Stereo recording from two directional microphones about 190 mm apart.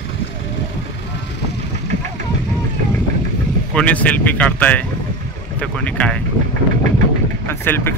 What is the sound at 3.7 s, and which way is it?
Speech, 5° left (ahead or behind).